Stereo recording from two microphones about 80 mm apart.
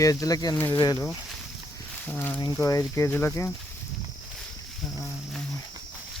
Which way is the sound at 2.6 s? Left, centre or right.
Left.